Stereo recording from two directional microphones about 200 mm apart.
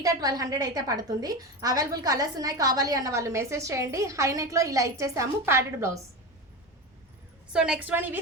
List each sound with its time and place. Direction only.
0.0 s a woman's voice: 20° right (ahead or behind)
7.5 s a woman's voice: 5° right (ahead or behind)